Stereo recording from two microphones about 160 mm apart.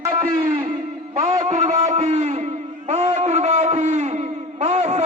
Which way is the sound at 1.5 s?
45° right (ahead or behind).